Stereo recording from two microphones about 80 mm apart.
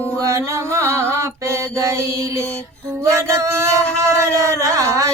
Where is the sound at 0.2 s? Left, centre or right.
Right.